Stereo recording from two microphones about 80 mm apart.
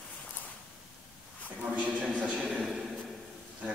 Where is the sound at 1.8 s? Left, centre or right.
Centre.